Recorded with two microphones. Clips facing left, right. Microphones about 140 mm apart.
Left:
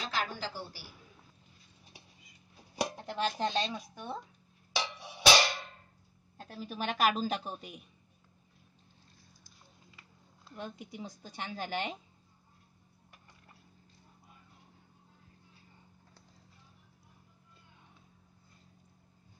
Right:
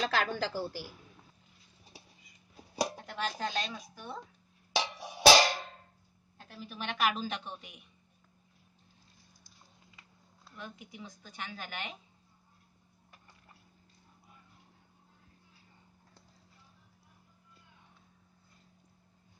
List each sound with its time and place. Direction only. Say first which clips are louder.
0.0 s a woman's voice: right 5 dB; 70° right (ahead or behind)
3.1 s speech: left 3 dB; 25° left (ahead or behind)
5.2 s music: right 4 dB; 40° right (ahead or behind)
6.3 s speech: left 4 dB; 35° left (ahead or behind)
10.5 s speech: left 4 dB; 35° left (ahead or behind)